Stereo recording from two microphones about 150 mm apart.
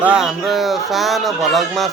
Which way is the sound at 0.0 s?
5° right (ahead or behind).